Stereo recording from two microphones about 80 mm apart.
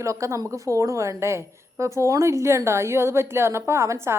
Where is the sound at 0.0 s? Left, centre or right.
Right.